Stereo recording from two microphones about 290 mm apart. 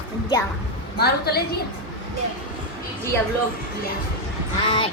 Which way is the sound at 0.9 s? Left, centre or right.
Left.